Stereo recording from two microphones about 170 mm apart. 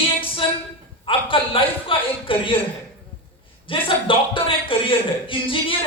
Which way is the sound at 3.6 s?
30° left (ahead or behind).